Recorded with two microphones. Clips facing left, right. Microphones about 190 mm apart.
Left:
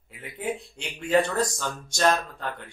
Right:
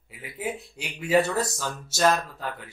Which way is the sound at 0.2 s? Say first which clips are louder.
Left 1 dB; 5° right (ahead or behind).